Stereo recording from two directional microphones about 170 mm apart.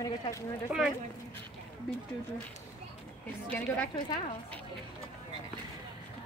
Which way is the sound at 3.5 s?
10° left (ahead or behind).